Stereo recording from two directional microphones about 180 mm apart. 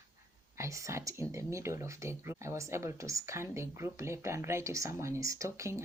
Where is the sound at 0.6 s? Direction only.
15° right (ahead or behind).